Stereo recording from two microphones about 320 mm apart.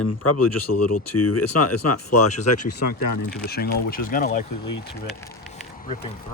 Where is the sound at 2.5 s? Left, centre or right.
Left.